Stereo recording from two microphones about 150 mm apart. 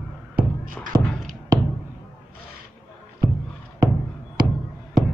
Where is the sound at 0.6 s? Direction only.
65° right (ahead or behind).